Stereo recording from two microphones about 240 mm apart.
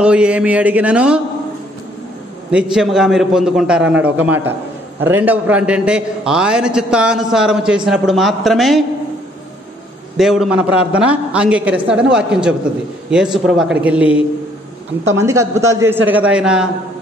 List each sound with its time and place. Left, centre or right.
0.0 s a man's voice: centre
2.5 s a man's voice: centre
10.1 s a man's voice: centre